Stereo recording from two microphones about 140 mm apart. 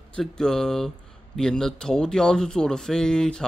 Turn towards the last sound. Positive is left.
turn(degrees=5)  # may be behind; listen again after turning